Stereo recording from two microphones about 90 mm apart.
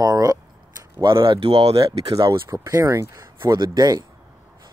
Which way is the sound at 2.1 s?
75° right (ahead or behind).